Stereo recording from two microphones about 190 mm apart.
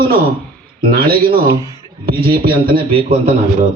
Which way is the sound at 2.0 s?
55° right (ahead or behind).